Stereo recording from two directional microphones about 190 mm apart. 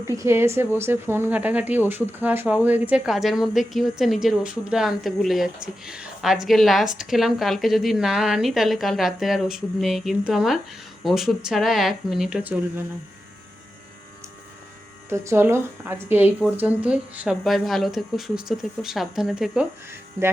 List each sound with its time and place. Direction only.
0.1 s a woman's voice: 15° right (ahead or behind)
15.1 s a woman's voice: 15° right (ahead or behind)
19.9 s speech: 15° right (ahead or behind)